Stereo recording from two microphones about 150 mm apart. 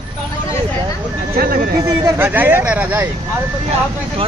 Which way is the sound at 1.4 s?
70° right (ahead or behind).